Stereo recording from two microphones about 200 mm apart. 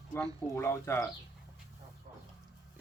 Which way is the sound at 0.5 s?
15° left (ahead or behind).